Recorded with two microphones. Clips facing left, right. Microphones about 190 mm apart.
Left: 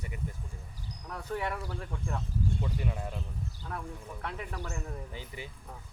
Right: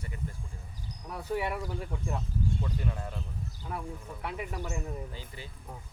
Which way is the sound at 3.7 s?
10° right (ahead or behind).